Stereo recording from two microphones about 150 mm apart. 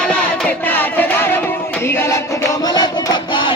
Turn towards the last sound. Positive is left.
turn(degrees=30)  # may be behind; listen again after turning